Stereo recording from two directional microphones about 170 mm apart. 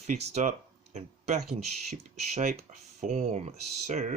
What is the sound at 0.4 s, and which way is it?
Speech, 45° right (ahead or behind).